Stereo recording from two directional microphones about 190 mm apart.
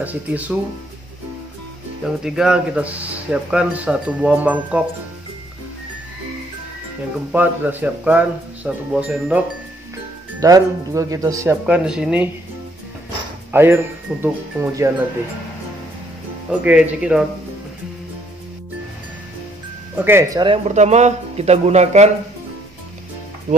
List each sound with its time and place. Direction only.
0.0 s speech: 10° right (ahead or behind)
2.0 s speech: centre (ahead or behind)
7.3 s speech: 10° right (ahead or behind)
10.4 s speech: 20° right (ahead or behind)
11.6 s speech: 5° right (ahead or behind)
13.5 s speech: 10° right (ahead or behind)
16.4 s speech: 5° right (ahead or behind)
20.1 s a man's voice: 15° right (ahead or behind); by 22.1 s 35° right (ahead or behind)